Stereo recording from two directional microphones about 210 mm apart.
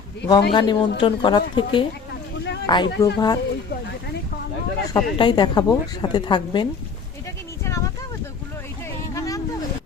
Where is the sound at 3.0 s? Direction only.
20° left (ahead or behind).